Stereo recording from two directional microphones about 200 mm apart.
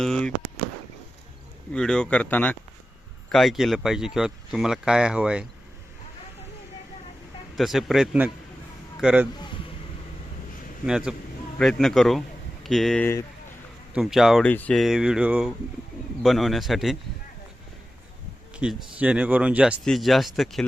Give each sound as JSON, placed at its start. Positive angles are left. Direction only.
{"t": 0.0, "sound": "a sound", "side_deg": 5}
{"t": 1.7, "sound": "speech", "side_deg": 5}
{"t": 7.5, "sound": "speech", "side_deg": 0}
{"t": 9.3, "sound": "a sound", "side_deg": 20}
{"t": 10.8, "sound": "speech", "side_deg": -5}
{"t": 13.9, "sound": "speech", "side_deg": 0}
{"t": 18.5, "sound": "speech", "side_deg": -5}